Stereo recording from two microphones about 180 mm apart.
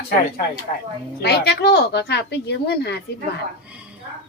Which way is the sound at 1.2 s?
65° left (ahead or behind).